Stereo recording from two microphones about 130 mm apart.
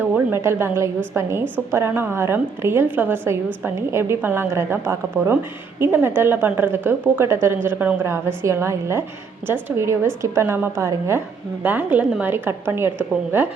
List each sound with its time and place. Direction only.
0.0 s a woman's voice: 15° right (ahead or behind)